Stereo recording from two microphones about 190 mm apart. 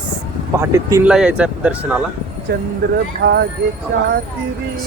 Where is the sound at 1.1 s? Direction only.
5° right (ahead or behind).